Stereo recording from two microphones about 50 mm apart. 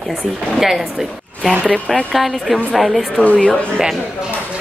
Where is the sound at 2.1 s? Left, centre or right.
Centre.